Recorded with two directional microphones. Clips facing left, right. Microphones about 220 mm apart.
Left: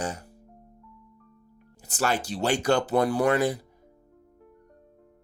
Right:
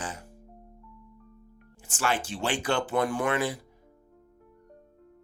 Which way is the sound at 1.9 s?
40° left (ahead or behind).